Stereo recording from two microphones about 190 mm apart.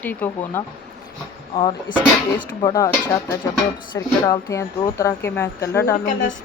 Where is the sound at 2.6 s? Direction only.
20° left (ahead or behind).